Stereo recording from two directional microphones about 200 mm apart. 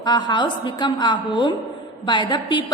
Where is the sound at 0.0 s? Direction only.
20° left (ahead or behind).